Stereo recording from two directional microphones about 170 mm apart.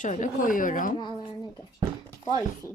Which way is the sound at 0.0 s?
50° left (ahead or behind).